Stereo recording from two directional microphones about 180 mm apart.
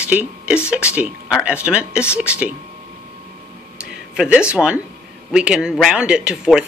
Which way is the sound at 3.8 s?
5° right (ahead or behind).